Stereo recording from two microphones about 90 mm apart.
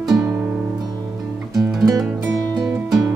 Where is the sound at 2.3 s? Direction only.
40° right (ahead or behind).